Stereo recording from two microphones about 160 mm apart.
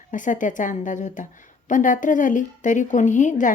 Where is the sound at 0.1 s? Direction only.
55° left (ahead or behind).